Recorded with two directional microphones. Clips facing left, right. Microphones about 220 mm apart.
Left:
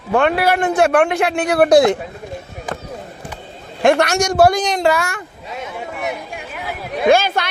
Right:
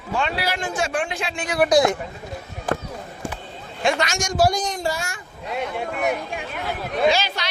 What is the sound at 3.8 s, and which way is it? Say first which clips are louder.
A man's voice: left 9 dB; 60° left (ahead or behind).